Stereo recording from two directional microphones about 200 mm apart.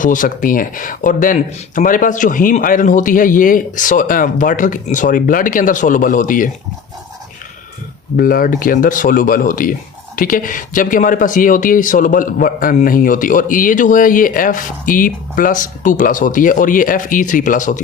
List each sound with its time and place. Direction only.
0.0 s speech: 40° left (ahead or behind)
8.1 s speech: 45° left (ahead or behind)